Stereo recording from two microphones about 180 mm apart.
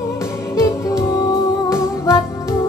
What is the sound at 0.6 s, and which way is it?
Music, 20° left (ahead or behind).